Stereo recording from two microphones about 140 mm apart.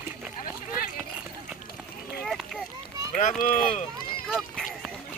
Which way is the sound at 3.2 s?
70° left (ahead or behind).